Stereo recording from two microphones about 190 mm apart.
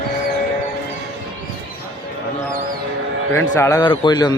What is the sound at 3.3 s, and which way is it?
A man's voice, 15° left (ahead or behind).